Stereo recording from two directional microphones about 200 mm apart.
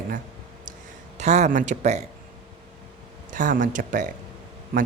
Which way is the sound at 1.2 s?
35° right (ahead or behind).